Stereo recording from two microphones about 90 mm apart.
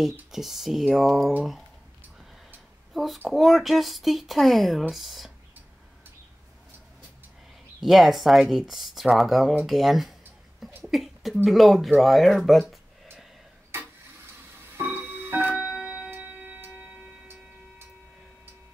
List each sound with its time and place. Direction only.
0.3 s speech: 5° right (ahead or behind)
2.9 s a sound: centre (ahead or behind)
3.3 s speech: centre (ahead or behind)
7.8 s speech: centre (ahead or behind)
14.6 s music: 25° right (ahead or behind)
15.5 s clock: 10° right (ahead or behind)